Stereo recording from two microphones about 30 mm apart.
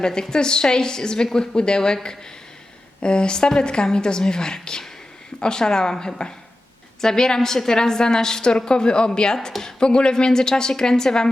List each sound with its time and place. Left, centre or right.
0.0 s a woman's voice: left
3.0 s a woman's voice: left